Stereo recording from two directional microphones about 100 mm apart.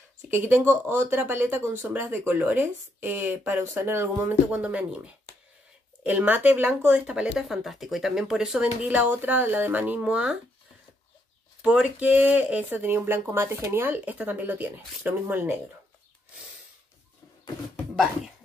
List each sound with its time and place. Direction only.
0.3 s speech: 20° right (ahead or behind)
11.6 s speech: 10° right (ahead or behind)